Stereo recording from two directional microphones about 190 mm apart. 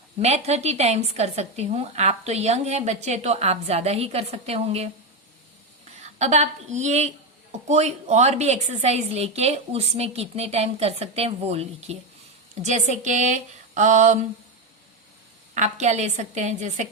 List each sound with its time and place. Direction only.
0.2 s speech: 35° right (ahead or behind)
6.0 s a woman's voice: 35° right (ahead or behind)
15.5 s speech: 35° right (ahead or behind)